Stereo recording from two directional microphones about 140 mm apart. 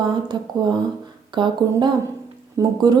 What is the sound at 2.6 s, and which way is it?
Speech, 20° right (ahead or behind).